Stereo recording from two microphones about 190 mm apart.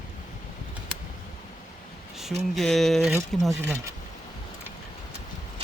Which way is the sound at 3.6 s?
15° right (ahead or behind).